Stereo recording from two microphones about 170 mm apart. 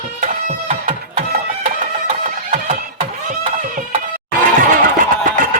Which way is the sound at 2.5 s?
35° right (ahead or behind).